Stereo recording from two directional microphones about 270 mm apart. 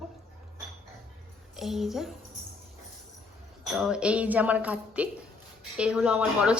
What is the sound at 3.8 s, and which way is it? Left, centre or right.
A woman's voice, centre.